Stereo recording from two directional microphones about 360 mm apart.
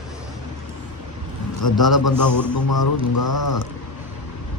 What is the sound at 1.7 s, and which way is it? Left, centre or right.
Speech, centre.